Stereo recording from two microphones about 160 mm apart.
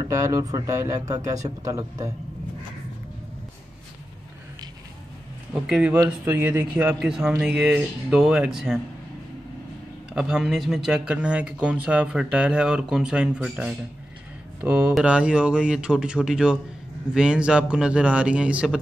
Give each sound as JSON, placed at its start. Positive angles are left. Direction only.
{"t": 0.1, "sound": "a man's voice", "side_deg": -20}
{"t": 5.5, "sound": "a man's voice", "side_deg": -10}
{"t": 10.1, "sound": "a man's voice", "side_deg": -5}